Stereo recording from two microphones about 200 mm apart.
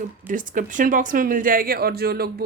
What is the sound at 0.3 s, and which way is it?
Speech, 40° right (ahead or behind).